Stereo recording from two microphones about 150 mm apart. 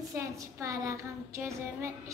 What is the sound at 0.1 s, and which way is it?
A woman's voice, 20° right (ahead or behind).